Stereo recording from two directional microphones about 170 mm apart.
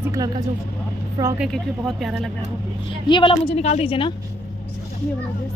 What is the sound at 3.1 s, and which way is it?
Speech, 30° left (ahead or behind).